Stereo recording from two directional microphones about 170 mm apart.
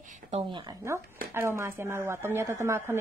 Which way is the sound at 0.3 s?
30° right (ahead or behind).